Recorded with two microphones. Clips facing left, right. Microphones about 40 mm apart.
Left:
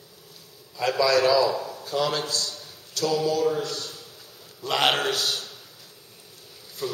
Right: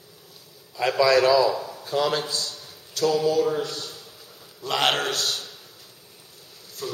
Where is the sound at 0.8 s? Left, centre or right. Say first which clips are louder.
Right 2 dB; centre.